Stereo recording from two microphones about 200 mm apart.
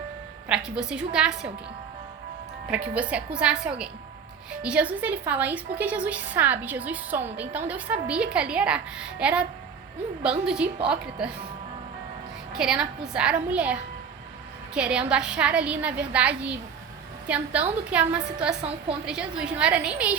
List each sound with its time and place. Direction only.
0.4 s a woman's voice: 5° right (ahead or behind)
2.6 s a woman's voice: 5° right (ahead or behind)
12.5 s a woman's voice: 5° right (ahead or behind)
14.8 s a woman's voice: 5° right (ahead or behind)
18.6 s a woman's voice: 30° right (ahead or behind)
19.0 s a woman's voice: 5° right (ahead or behind)